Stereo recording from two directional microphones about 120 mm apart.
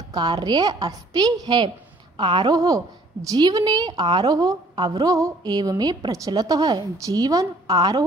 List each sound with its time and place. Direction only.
0.1 s a woman's voice: 35° right (ahead or behind)